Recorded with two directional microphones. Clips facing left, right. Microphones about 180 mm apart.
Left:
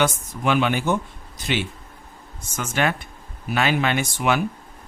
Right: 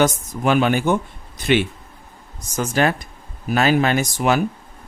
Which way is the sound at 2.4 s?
35° right (ahead or behind).